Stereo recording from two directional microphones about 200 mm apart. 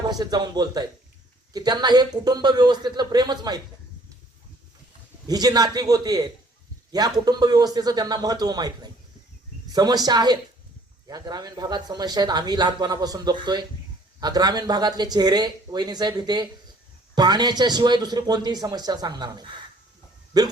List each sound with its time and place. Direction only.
0.1 s speech: 20° right (ahead or behind)
5.3 s speech: 20° right (ahead or behind)